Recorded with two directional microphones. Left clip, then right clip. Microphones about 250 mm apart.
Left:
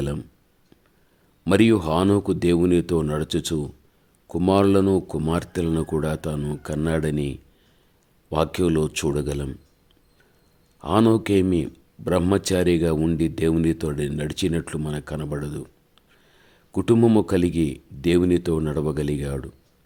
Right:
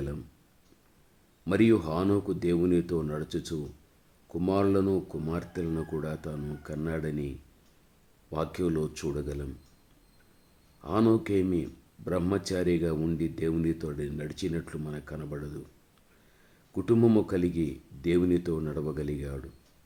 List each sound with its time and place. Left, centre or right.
1.5 s speech: left
10.8 s speech: left
16.7 s speech: left